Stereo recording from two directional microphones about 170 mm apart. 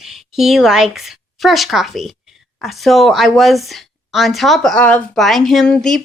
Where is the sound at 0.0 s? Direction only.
Centre (ahead or behind).